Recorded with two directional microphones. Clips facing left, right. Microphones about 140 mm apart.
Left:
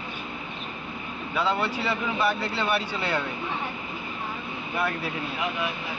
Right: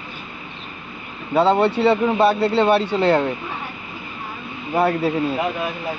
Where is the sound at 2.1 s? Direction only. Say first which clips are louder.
Right 9 dB; 35° right (ahead or behind).